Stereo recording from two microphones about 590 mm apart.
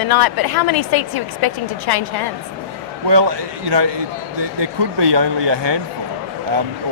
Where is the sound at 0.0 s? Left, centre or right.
Left.